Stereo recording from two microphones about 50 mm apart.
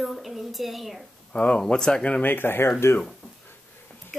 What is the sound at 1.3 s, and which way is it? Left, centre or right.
Speech, left.